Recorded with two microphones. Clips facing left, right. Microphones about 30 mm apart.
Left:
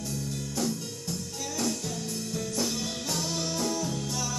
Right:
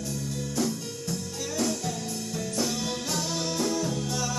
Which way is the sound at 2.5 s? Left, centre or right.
Centre.